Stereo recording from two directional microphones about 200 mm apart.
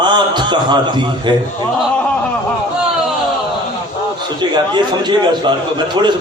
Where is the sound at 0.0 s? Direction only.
20° right (ahead or behind).